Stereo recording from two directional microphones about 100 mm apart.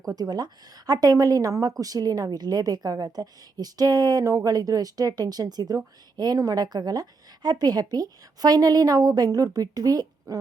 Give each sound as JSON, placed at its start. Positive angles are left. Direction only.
{"t": 0.1, "sound": "a woman's voice", "side_deg": -40}